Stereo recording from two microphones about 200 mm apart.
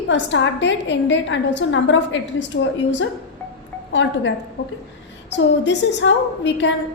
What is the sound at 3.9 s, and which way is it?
Speech, 65° left (ahead or behind).